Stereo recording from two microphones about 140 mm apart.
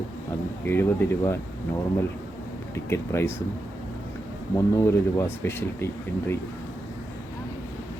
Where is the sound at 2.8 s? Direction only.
20° left (ahead or behind).